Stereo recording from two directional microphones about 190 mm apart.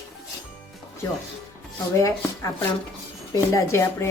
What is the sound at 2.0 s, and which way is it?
A woman's voice, 15° left (ahead or behind).